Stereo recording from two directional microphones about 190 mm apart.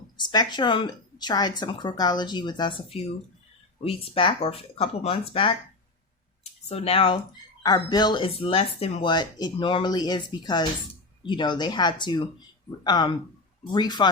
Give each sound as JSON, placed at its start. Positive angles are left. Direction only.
{"t": 0.2, "sound": "speech", "side_deg": 25}